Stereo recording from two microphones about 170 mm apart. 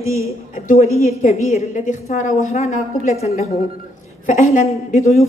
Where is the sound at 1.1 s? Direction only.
40° left (ahead or behind).